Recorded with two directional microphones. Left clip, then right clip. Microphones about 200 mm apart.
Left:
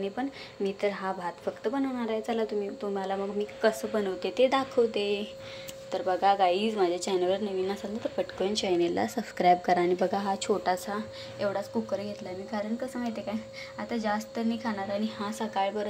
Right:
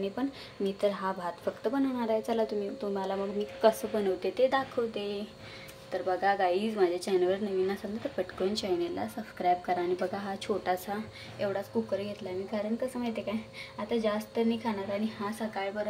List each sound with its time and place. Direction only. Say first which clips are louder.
0.7 s speech: even; 5° right (ahead or behind)
4.3 s speech: left 4 dB; 10° left (ahead or behind)
8.8 s speech: left 6 dB; 20° left (ahead or behind); by 15.0 s centre (ahead or behind)
15.2 s a woman's voice: left 4 dB; 20° left (ahead or behind)